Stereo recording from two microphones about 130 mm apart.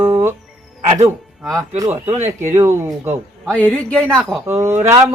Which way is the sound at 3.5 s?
10° left (ahead or behind).